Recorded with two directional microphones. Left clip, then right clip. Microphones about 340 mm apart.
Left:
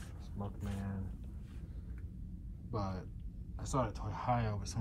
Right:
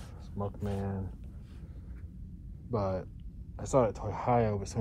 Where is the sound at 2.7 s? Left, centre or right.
Centre.